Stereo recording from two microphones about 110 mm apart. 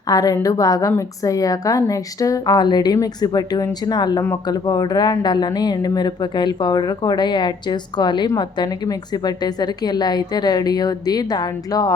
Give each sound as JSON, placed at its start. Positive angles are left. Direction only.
{"t": 0.1, "sound": "speech", "side_deg": 35}